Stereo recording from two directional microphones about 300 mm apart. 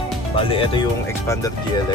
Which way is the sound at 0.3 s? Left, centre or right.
Centre.